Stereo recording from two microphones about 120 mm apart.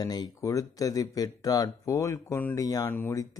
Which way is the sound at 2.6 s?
30° left (ahead or behind).